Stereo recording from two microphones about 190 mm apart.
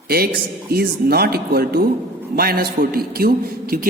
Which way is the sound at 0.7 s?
55° right (ahead or behind).